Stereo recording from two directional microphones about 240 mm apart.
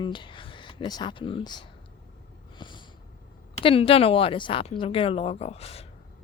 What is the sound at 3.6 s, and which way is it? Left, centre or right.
Speech, left.